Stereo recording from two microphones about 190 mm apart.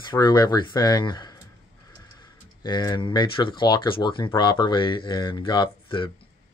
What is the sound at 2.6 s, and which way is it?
Speech, 25° left (ahead or behind).